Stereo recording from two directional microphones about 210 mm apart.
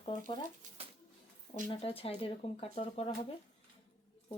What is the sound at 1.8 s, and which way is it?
Speech, 25° left (ahead or behind).